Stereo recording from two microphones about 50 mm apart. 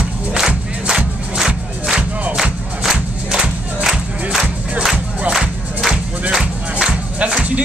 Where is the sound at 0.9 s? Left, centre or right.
Centre.